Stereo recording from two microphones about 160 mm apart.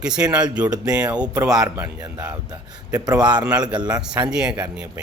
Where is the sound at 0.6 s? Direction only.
25° right (ahead or behind).